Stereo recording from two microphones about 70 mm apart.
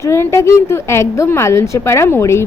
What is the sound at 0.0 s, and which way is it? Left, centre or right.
A woman's voice, left.